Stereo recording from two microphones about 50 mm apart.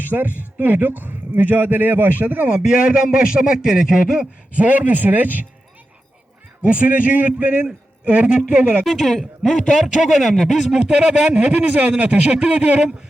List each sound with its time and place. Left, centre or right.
0.0 s speech: right
2.5 s speech: centre
4.5 s speech: right
6.7 s speech: right
8.8 s speech: centre
10.8 s speech: centre